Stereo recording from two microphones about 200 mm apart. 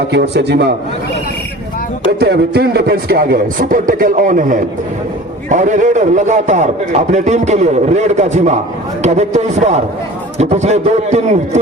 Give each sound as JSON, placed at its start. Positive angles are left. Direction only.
{"t": 0.1, "sound": "a man's voice", "side_deg": -55}
{"t": 2.0, "sound": "a man's voice", "side_deg": -50}